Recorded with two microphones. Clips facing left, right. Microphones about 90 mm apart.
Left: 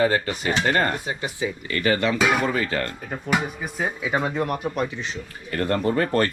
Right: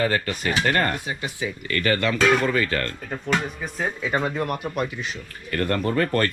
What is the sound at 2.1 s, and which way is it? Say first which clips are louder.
Speech: right 2 dB; 10° left (ahead or behind).